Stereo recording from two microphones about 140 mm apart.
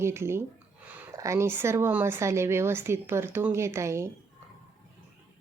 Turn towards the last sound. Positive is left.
turn(degrees=-20)  # may be behind; listen again after turning